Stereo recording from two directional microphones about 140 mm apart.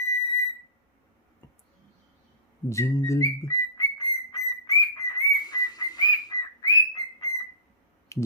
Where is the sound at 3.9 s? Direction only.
30° left (ahead or behind).